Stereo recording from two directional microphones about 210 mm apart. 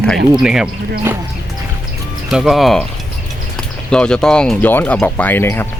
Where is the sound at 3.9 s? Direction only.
5° left (ahead or behind).